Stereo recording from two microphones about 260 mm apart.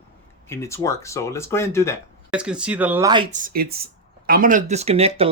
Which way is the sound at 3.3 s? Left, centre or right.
Right.